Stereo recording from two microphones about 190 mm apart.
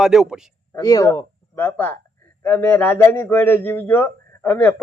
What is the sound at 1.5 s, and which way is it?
A man's voice, 10° left (ahead or behind).